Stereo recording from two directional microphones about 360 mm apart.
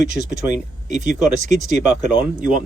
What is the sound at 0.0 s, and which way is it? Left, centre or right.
Speech, centre.